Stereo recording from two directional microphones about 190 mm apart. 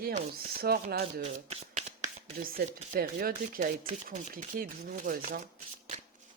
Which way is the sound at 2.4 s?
50° right (ahead or behind).